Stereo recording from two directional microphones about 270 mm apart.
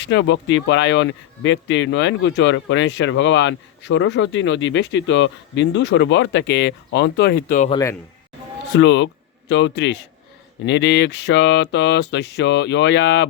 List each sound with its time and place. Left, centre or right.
0.0 s speech: left
7.7 s speech: centre
8.8 s speech: left